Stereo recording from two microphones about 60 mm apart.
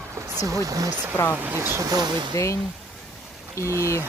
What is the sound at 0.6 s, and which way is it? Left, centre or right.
Speech, right.